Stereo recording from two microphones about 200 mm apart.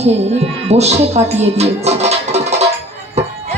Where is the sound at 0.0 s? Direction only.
30° right (ahead or behind).